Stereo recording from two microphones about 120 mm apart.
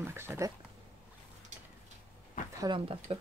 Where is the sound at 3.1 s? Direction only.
55° right (ahead or behind).